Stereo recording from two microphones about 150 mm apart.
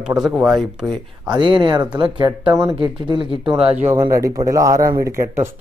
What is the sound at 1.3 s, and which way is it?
Speech, 30° right (ahead or behind).